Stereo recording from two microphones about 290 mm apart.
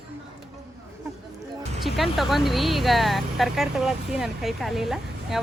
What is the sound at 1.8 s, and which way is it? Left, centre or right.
Speech, centre.